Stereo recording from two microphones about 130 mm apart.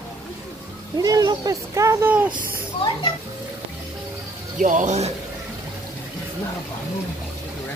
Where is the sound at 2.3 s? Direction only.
90° right.